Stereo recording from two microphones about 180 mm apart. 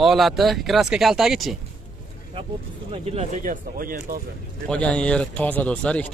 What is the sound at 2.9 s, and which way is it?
Speech, 35° right (ahead or behind).